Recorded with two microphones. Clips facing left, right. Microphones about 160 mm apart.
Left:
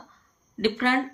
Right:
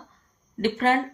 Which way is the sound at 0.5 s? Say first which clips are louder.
Right 2 dB; 40° right (ahead or behind).